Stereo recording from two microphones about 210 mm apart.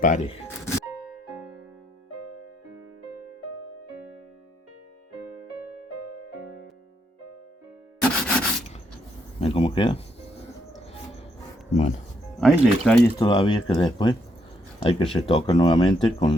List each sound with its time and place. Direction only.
0.0 s speech: 35° left (ahead or behind)
8.0 s rub: 5° left (ahead or behind)
9.4 s speech: 25° left (ahead or behind)
11.7 s speech: 35° left (ahead or behind)
12.4 s speech: centre (ahead or behind)
13.1 s speech: 20° left (ahead or behind)